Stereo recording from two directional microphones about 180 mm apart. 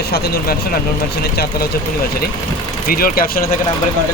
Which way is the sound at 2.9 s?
55° left (ahead or behind).